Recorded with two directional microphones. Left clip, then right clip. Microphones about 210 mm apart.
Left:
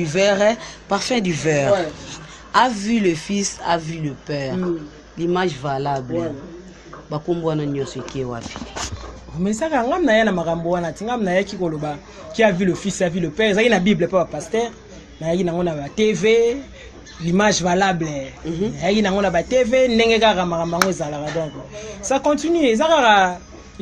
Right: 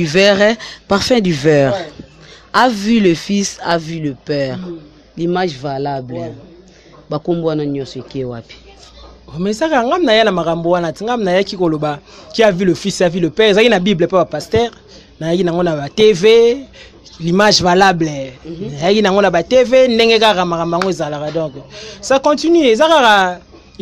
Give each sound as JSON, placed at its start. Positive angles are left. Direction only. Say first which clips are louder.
{"t": 0.0, "sound": "speech", "louder": "right 6 dB", "side_deg": -50}
{"t": 9.4, "sound": "speech", "louder": "right 6 dB", "side_deg": -50}